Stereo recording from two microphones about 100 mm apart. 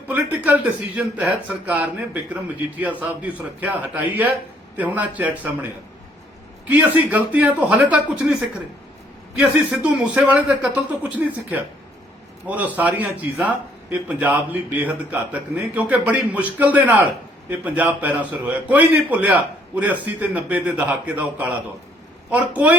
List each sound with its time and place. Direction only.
0.1 s a man's voice: 15° right (ahead or behind)
6.7 s a man's voice: 15° right (ahead or behind)
9.4 s a man's voice: 10° right (ahead or behind)